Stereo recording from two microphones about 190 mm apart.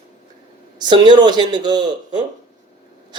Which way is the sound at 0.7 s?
25° right (ahead or behind).